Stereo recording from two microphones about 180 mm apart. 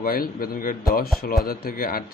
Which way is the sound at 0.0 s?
55° left (ahead or behind).